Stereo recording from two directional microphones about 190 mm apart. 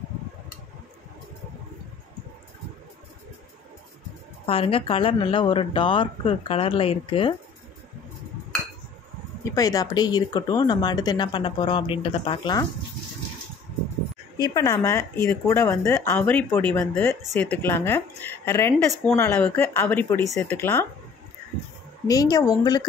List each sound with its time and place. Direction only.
4.5 s speech: 30° left (ahead or behind)
9.4 s speech: 20° left (ahead or behind)
14.4 s a woman's voice: 15° left (ahead or behind)
22.0 s speech: 20° left (ahead or behind)